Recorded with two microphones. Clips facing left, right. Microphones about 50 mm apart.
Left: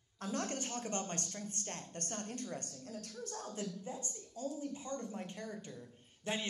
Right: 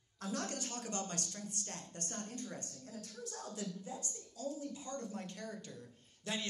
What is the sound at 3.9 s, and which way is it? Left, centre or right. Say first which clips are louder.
A woman's voice: left 1 dB; left.